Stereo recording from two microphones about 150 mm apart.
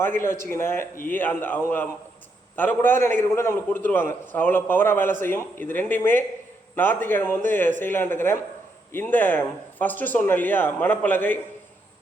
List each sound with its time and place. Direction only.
0.0 s a man's voice: 15° left (ahead or behind)